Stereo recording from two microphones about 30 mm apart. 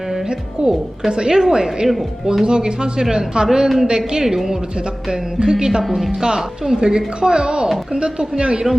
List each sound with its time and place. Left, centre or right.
1.1 s speech: right
2.4 s speech: right